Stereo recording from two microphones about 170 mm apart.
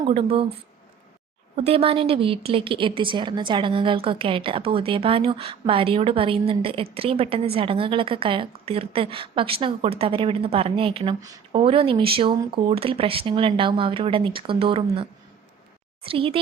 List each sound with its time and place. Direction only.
0.0 s speech: 35° right (ahead or behind)
1.5 s a woman's voice: 35° right (ahead or behind)
16.0 s a woman's voice: 35° right (ahead or behind)